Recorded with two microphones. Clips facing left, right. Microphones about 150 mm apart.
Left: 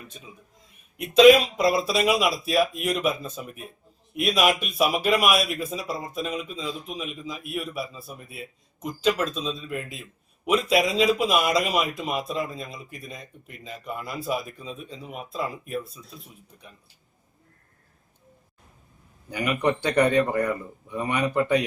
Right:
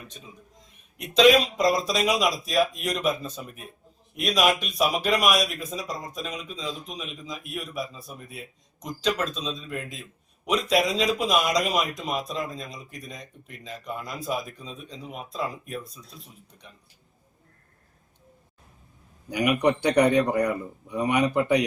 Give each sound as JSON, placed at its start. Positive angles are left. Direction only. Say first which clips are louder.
{"t": 0.9, "sound": "a man's voice", "louder": "left 4 dB", "side_deg": 5}
{"t": 19.3, "sound": "speech", "louder": "right 2 dB", "side_deg": -15}